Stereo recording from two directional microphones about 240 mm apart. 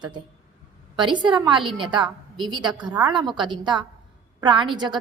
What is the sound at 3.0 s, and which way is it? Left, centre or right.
A woman's voice, centre.